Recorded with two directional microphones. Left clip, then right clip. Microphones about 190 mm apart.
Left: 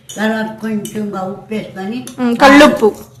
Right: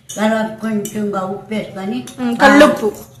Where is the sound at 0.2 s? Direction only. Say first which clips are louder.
Right 1 dB; 5° right (ahead or behind).